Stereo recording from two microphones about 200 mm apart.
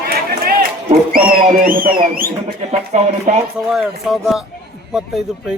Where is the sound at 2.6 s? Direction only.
35° right (ahead or behind).